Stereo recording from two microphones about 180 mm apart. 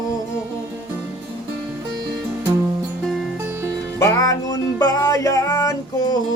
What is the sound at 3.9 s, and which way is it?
Music, 15° left (ahead or behind).